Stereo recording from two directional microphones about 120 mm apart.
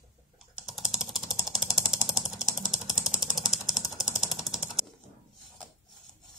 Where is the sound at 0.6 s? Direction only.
Centre (ahead or behind).